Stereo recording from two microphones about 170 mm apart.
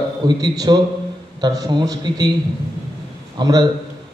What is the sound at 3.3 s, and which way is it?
Speech, 25° right (ahead or behind).